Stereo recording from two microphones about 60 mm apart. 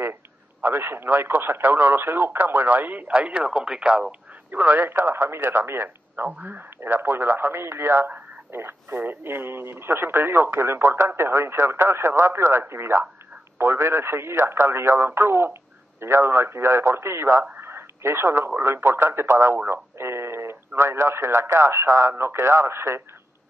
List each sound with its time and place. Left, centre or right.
0.6 s speech: right
3.4 s speech: centre
4.5 s speech: right
17.6 s a sound: right
18.6 s speech: right
19.3 s speech: right